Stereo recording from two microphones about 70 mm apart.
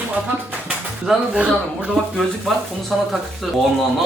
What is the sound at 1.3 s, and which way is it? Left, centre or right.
Speech, centre.